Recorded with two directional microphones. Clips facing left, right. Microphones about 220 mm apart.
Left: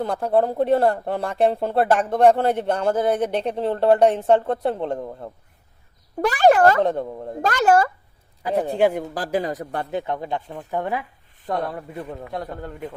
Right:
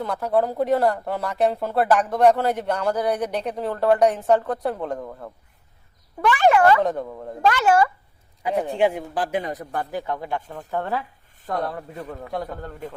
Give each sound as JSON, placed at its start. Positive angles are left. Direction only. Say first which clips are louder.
{"t": 0.0, "sound": "speech", "louder": "left 2 dB", "side_deg": 30}
{"t": 6.2, "sound": "speech", "louder": "left 2 dB", "side_deg": 40}
{"t": 7.4, "sound": "speech", "louder": "even", "side_deg": 40}
{"t": 12.3, "sound": "speech", "louder": "right 2 dB", "side_deg": 0}